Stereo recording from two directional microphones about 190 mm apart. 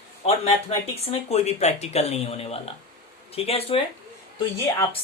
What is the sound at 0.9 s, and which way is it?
Speech, 35° left (ahead or behind).